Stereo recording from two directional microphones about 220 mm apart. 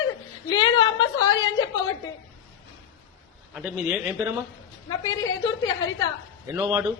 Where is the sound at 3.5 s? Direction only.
5° right (ahead or behind).